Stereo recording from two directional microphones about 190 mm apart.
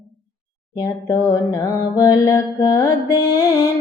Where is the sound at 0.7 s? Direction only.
15° left (ahead or behind).